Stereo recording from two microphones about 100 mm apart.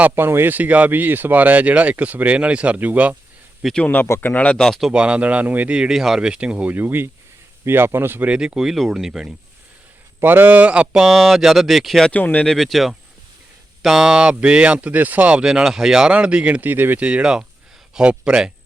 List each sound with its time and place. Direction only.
0.0 s speech: 25° right (ahead or behind)
3.8 s speech: 15° left (ahead or behind)
4.9 s speech: 10° right (ahead or behind)
8.3 s speech: 10° right (ahead or behind)
10.2 s speech: 20° right (ahead or behind); by 12.1 s centre (ahead or behind)
12.1 s speech: 15° left (ahead or behind)
12.5 s speech: centre (ahead or behind)